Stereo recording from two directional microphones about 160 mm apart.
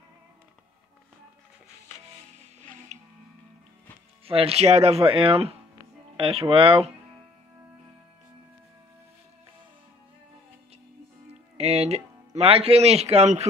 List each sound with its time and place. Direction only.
4.3 s speech: 35° right (ahead or behind)
11.5 s speech: 40° right (ahead or behind)